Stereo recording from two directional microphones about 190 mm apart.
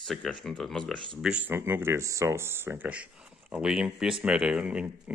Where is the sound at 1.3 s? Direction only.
10° right (ahead or behind).